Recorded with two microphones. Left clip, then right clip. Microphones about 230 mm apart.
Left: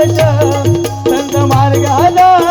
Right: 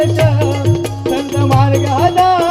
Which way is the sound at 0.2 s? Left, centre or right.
Left.